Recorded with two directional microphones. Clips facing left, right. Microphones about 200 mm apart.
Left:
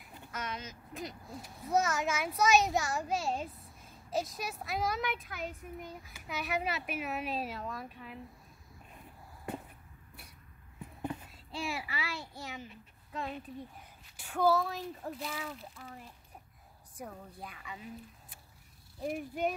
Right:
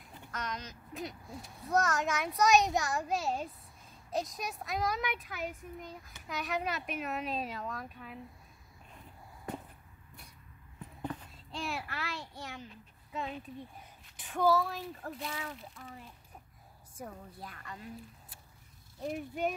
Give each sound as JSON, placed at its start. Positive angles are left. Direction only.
{"t": 0.0, "sound": "speech", "side_deg": 5}
{"t": 11.0, "sound": "a child's voice", "side_deg": 10}
{"t": 16.9, "sound": "speech", "side_deg": 0}
{"t": 18.9, "sound": "speech", "side_deg": 5}